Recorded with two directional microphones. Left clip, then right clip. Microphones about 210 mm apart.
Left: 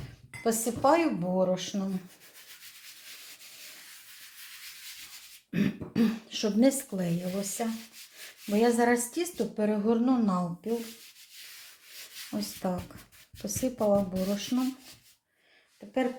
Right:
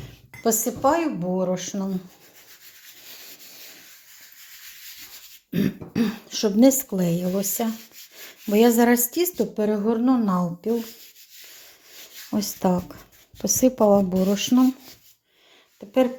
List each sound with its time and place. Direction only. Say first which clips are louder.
0.4 s speech: right 5 dB; 25° right (ahead or behind)
5.5 s throat clearing: right 5 dB; 25° right (ahead or behind)
6.3 s a woman's voice: right 9 dB; 35° right (ahead or behind)
12.3 s a woman's voice: right 10 dB; 35° right (ahead or behind)